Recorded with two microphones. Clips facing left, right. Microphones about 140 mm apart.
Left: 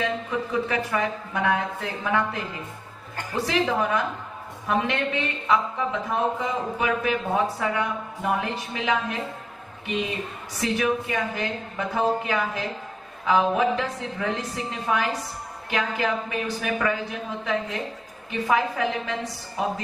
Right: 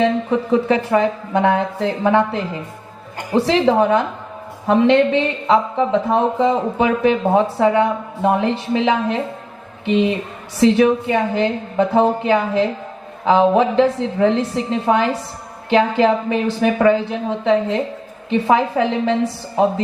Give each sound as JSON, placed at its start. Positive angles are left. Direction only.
{"t": 0.0, "sound": "a woman's voice", "side_deg": -30}